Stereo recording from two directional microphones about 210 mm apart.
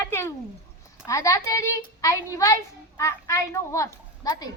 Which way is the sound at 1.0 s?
15° left (ahead or behind).